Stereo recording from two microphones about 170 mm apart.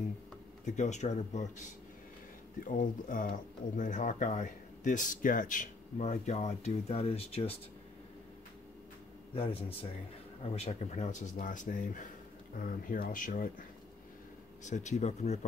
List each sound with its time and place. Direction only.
0.7 s speech: 45° left (ahead or behind)
9.3 s a man's voice: 35° left (ahead or behind)